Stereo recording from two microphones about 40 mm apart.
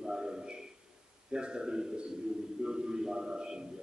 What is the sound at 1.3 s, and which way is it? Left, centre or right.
A man's voice, right.